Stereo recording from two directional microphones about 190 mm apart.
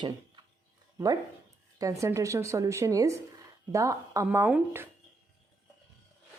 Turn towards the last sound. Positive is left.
turn(degrees=-10)  # may be behind; listen again after turning